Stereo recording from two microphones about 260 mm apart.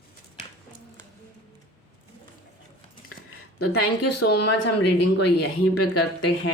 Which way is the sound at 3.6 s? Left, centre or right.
Left.